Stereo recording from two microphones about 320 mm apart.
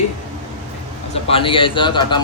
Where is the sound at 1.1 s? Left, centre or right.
Centre.